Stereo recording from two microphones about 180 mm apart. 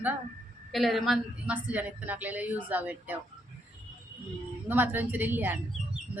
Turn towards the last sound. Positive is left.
turn(degrees=-10)  # may be behind; listen again after turning